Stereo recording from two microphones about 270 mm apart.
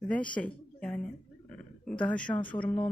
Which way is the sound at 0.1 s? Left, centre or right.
Centre.